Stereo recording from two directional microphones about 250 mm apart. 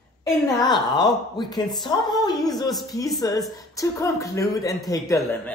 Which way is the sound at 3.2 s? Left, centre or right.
Centre.